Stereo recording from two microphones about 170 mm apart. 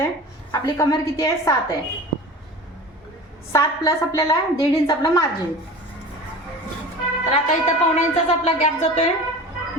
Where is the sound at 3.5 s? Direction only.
15° left (ahead or behind).